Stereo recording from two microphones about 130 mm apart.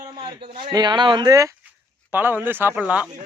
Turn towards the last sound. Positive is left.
turn(degrees=-10)  # may be behind; listen again after turning